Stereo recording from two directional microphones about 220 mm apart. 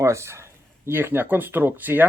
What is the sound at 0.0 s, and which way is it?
Speech, 10° right (ahead or behind).